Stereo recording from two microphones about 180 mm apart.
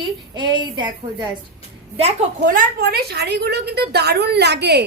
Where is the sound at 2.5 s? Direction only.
60° right (ahead or behind).